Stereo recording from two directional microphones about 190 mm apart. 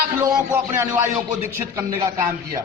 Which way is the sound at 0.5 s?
10° right (ahead or behind).